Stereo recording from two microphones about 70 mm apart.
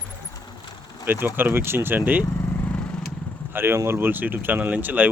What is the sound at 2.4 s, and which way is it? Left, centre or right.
Vehicle, left.